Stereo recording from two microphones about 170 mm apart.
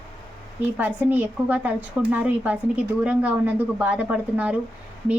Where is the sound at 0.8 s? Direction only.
10° right (ahead or behind).